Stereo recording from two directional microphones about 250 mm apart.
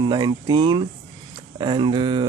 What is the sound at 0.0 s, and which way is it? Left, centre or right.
Speech, centre.